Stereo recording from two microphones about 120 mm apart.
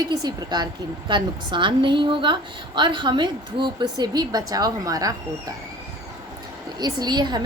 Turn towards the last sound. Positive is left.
turn(degrees=-35)  # may be behind; listen again after turning